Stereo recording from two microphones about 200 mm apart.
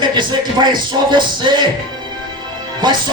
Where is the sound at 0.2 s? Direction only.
20° right (ahead or behind).